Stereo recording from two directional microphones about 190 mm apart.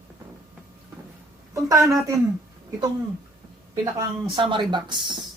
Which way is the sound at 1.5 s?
15° right (ahead or behind).